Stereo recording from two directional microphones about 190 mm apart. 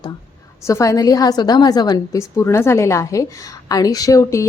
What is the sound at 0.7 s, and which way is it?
A woman's voice, 15° left (ahead or behind).